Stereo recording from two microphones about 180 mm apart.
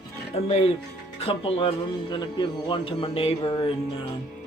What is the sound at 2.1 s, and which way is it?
Speech, 25° left (ahead or behind).